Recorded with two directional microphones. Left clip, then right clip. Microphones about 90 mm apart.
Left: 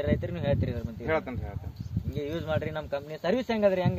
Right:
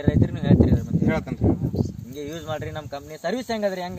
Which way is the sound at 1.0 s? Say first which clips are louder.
Right 1 dB; 15° right (ahead or behind).